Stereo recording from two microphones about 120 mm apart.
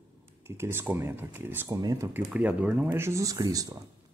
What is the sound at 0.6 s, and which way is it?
Speech, 20° right (ahead or behind).